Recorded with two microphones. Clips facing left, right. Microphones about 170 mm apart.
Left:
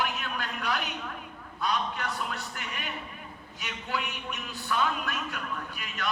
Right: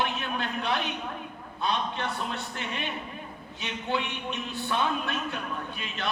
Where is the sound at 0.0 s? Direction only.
25° right (ahead or behind).